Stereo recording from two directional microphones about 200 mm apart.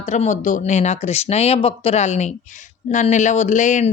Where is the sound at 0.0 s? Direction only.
35° left (ahead or behind).